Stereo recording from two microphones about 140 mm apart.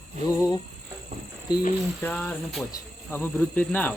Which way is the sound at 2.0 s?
10° left (ahead or behind).